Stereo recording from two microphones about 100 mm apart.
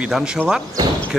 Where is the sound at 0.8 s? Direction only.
45° right (ahead or behind).